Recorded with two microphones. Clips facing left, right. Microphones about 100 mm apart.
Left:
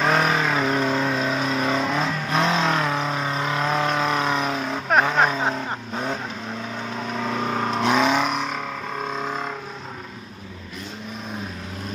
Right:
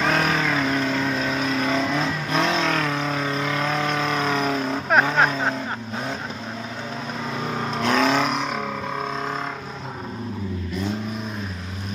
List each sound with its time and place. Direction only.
0.1 s vehicle: 20° left (ahead or behind)
4.8 s vehicle: 5° left (ahead or behind)
7.8 s vehicle: 10° left (ahead or behind)